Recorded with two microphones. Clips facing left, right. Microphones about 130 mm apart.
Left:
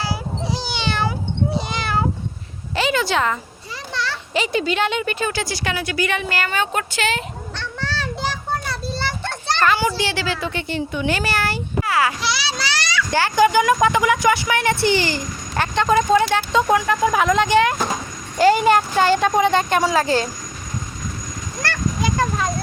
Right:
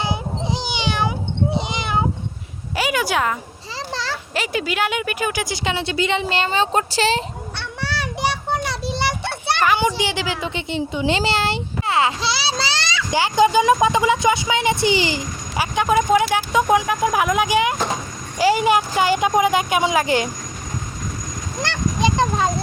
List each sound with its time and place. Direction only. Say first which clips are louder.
0.0 s cat: right 1 dB; 20° right (ahead or behind)
2.7 s a sound: left 1 dB; 10° right (ahead or behind)
4.4 s a woman's voice: left 3 dB; 5° right (ahead or behind); by 7.3 s 30° right (ahead or behind)
7.6 s children playing: even; 15° right (ahead or behind)
8.7 s children playing: right 2 dB; 75° right (ahead or behind)
9.0 s a child's voice: right 1 dB; 10° right (ahead or behind)
11.8 s a sound: even; 25° right (ahead or behind)
13.1 s speech: even; 15° right (ahead or behind)
21.6 s a sound: right 2 dB; 20° right (ahead or behind)